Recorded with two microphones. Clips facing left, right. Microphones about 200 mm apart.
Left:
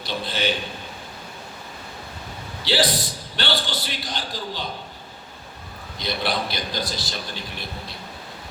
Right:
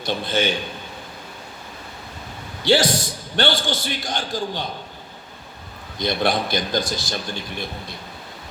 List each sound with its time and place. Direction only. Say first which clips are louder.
0.0 s a man's voice: right 4 dB; 50° right (ahead or behind)
2.6 s a man's voice: right 5 dB; 45° right (ahead or behind)
6.0 s a man's voice: right 5 dB; 50° right (ahead or behind)